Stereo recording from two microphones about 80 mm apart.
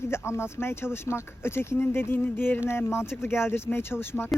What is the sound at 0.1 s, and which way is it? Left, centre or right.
Speech, left.